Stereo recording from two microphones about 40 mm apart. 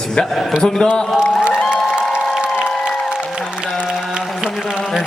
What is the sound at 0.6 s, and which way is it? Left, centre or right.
Speech, centre.